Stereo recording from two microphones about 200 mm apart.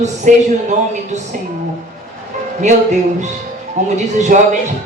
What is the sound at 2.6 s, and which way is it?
Speech, 35° right (ahead or behind).